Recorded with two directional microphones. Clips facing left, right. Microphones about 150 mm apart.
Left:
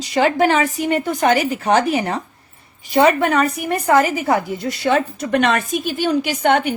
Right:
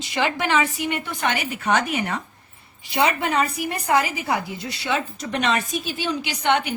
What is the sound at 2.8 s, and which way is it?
Speech, 45° left (ahead or behind).